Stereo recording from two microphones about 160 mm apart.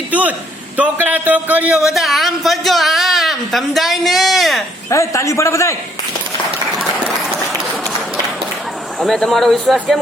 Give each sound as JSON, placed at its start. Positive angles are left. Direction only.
{"t": 0.1, "sound": "a man's voice", "side_deg": -10}
{"t": 4.9, "sound": "a man's voice", "side_deg": 20}
{"t": 9.0, "sound": "speech", "side_deg": 0}